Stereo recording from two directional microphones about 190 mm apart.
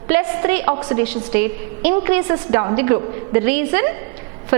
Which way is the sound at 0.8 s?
25° right (ahead or behind).